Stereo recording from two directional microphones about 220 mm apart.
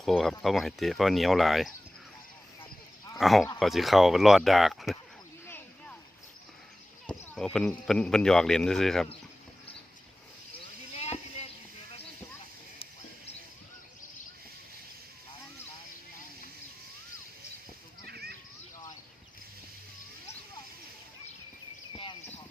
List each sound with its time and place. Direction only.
0.0 s speech: centre (ahead or behind)
3.2 s speech: centre (ahead or behind)
5.5 s a sound: 5° left (ahead or behind)
7.1 s speech: 5° left (ahead or behind)
10.9 s a sound: 30° left (ahead or behind)
18.0 s children playing: 45° right (ahead or behind)